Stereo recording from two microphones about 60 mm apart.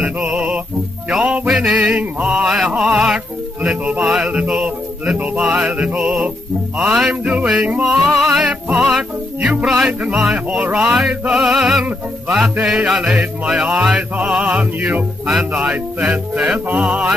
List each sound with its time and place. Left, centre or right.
0.0 s music: centre
4.3 s music: centre
5.4 s music: centre
5.7 s music: centre
6.8 s music: centre
7.4 s music: right
7.8 s music: centre; by 15.0 s right
15.2 s music: centre
16.5 s music: right